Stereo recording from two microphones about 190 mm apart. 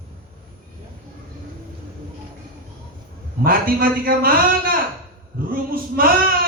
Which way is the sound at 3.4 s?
50° right (ahead or behind).